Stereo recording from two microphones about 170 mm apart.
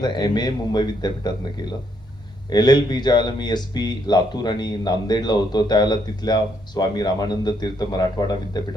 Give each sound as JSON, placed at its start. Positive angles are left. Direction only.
{"t": 0.0, "sound": "speech", "side_deg": 25}
{"t": 2.5, "sound": "speech", "side_deg": 25}